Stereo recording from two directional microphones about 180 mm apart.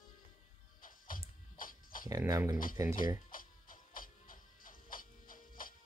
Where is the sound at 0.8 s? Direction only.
50° left (ahead or behind).